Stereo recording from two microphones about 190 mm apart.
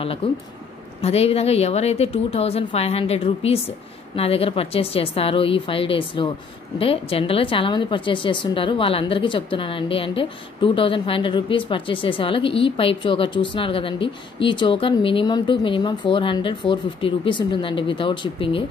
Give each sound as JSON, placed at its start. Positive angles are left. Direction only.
{"t": 0.0, "sound": "a woman's voice", "side_deg": 30}